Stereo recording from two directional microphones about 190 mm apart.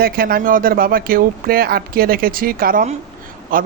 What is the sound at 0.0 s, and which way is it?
Speech, 50° right (ahead or behind).